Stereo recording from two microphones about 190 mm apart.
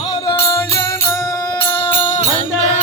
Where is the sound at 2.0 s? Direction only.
30° left (ahead or behind).